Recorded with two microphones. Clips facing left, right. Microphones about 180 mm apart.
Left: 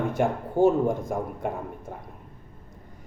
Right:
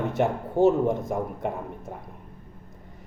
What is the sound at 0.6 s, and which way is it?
Speech, 25° right (ahead or behind).